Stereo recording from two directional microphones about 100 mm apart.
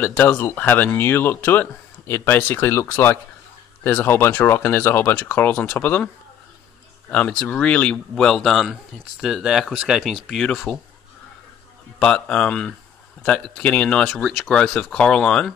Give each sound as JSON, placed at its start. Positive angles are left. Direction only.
{"t": 0.0, "sound": "speech", "side_deg": 20}
{"t": 7.1, "sound": "speech", "side_deg": 15}
{"t": 12.0, "sound": "speech", "side_deg": 10}